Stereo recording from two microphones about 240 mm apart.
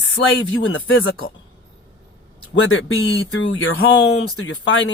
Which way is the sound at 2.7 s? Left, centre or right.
Left.